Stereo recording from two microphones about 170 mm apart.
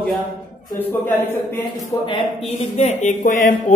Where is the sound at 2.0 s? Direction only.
30° left (ahead or behind).